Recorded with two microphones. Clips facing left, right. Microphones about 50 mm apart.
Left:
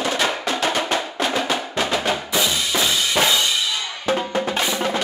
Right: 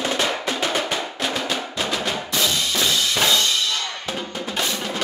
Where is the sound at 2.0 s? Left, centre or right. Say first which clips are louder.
Left 2 dB; centre.